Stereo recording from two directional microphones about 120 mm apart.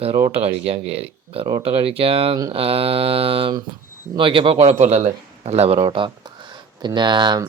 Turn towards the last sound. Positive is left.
turn(degrees=-40)  # may be behind; listen again after turning